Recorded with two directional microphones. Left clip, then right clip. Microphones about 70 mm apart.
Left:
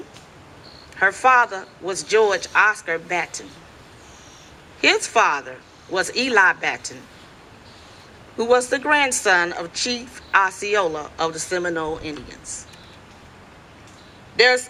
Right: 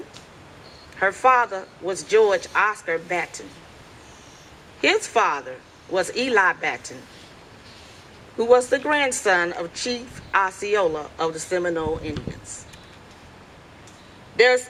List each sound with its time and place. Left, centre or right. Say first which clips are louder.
0.9 s a woman's voice: left 2 dB; left
4.8 s a woman's voice: left 3 dB; left
8.4 s a woman's voice: right 1 dB; left
14.3 s a woman's voice: left 1 dB; left